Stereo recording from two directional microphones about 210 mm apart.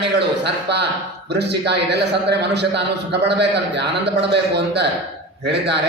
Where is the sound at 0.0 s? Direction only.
55° right (ahead or behind).